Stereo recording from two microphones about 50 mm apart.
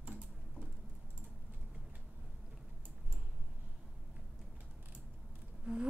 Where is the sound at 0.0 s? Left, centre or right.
Right.